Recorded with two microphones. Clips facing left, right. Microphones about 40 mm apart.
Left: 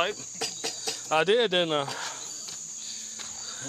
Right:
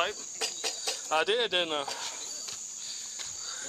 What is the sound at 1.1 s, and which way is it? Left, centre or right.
Cutlery, centre.